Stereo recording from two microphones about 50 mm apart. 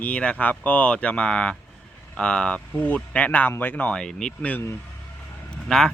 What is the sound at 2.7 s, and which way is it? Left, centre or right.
Speech, left.